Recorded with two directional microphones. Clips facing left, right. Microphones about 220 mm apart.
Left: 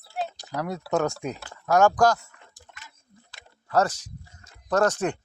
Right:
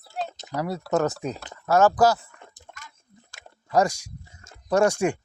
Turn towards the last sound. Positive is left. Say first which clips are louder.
# right 2 dB
turn(degrees=-10)  # may be behind; listen again after turning